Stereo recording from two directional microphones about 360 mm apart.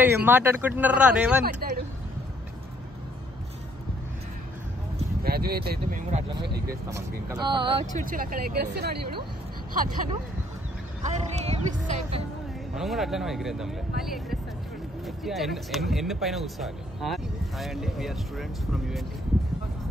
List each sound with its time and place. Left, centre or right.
0.0 s speech: centre
1.4 s speech: right
4.9 s speech: right
6.9 s speech: centre; by 9.2 s right
11.1 s music: centre
12.7 s speech: centre